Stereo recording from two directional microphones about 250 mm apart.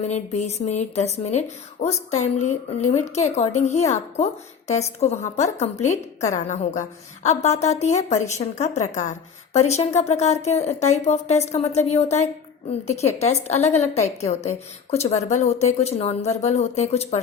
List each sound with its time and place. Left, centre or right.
0.0 s a woman's voice: left